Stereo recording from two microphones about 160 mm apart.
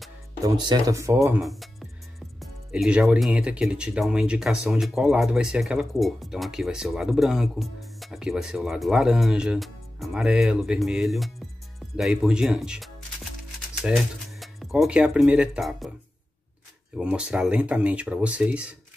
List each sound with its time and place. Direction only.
0.4 s speech: 25° right (ahead or behind)
1.4 s music: centre (ahead or behind)
2.4 s speech: 5° right (ahead or behind)
16.9 s speech: 5° right (ahead or behind)